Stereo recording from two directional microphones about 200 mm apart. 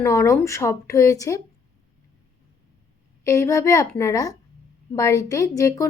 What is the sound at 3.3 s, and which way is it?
A woman's voice, 15° left (ahead or behind).